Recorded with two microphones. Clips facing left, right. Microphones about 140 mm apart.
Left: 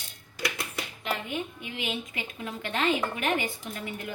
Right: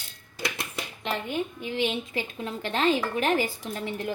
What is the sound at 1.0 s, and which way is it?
A woman's voice, 30° right (ahead or behind).